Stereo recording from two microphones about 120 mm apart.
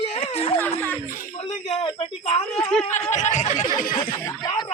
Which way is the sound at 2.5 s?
5° left (ahead or behind).